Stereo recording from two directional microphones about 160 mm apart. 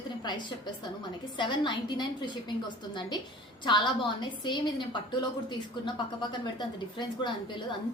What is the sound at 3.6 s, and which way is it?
A woman's voice, 30° left (ahead or behind).